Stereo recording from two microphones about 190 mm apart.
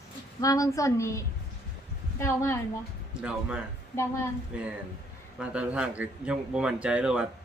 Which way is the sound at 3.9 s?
15° left (ahead or behind).